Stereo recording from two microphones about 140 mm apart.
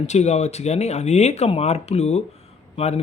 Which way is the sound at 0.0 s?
50° left (ahead or behind).